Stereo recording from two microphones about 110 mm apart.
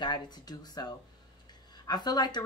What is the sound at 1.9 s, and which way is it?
Speech, 40° left (ahead or behind).